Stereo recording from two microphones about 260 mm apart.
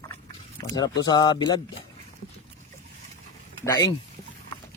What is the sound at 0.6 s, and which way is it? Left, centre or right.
Speech, centre.